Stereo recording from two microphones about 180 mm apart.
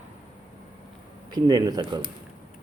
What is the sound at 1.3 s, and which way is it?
Speech, 20° right (ahead or behind).